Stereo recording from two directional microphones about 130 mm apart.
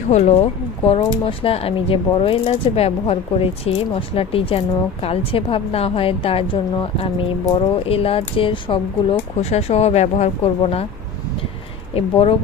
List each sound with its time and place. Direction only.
0.1 s speech: 55° left (ahead or behind)
9.4 s speech: 55° left (ahead or behind)
11.9 s speech: 45° left (ahead or behind)